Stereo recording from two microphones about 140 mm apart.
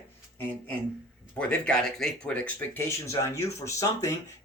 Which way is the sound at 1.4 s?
10° left (ahead or behind).